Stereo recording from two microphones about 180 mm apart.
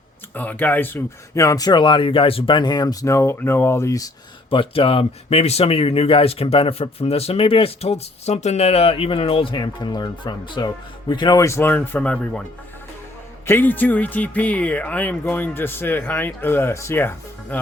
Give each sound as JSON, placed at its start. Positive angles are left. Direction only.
{"t": 0.3, "sound": "speech", "side_deg": 10}
{"t": 4.4, "sound": "a man's voice", "side_deg": 30}
{"t": 13.5, "sound": "a man's voice", "side_deg": 10}